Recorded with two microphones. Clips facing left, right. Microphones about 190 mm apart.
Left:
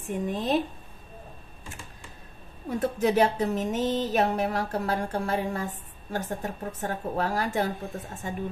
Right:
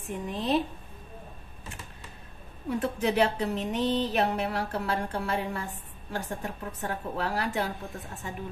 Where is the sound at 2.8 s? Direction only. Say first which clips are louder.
Left 3 dB; 40° left (ahead or behind).